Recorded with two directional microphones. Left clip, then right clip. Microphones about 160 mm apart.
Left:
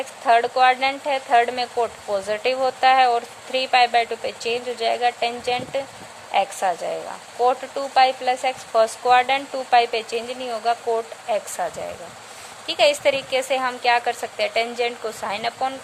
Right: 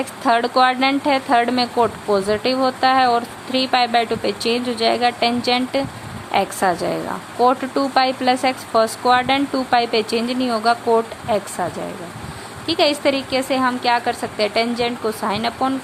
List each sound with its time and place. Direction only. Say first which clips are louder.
0.0 s speech: even; 10° left (ahead or behind)
11.3 s a woman's voice: right 3 dB; 25° left (ahead or behind)